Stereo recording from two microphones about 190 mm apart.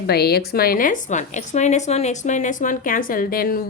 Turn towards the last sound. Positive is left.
turn(degrees=50)  # may be behind; listen again after turning